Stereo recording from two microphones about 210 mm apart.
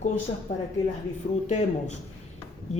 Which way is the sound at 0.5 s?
30° left (ahead or behind).